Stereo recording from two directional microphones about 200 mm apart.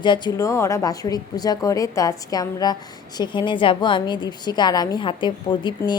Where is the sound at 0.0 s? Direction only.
20° left (ahead or behind).